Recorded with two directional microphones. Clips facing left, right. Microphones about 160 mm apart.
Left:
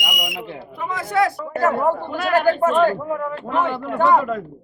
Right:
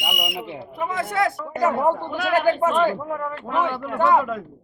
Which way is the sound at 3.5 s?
5° right (ahead or behind).